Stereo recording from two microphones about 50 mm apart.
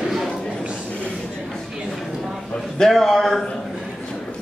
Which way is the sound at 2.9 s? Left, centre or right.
Centre.